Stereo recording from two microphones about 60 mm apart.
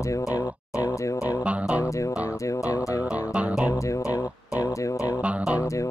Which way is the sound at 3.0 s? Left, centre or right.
Right.